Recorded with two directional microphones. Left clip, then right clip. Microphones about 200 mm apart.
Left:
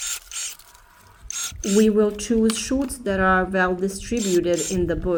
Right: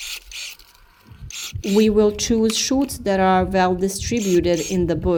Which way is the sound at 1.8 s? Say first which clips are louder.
Right 3 dB; 35° right (ahead or behind).